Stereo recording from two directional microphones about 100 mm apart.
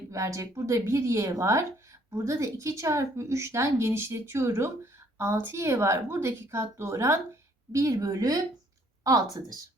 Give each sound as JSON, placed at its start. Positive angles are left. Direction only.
{"t": 0.1, "sound": "a woman's voice", "side_deg": -30}